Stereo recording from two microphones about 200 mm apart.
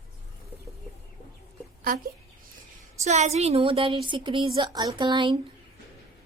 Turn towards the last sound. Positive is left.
turn(degrees=-25)  # may be behind; listen again after turning